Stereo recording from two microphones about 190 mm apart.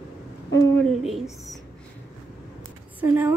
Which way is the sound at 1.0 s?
Centre (ahead or behind).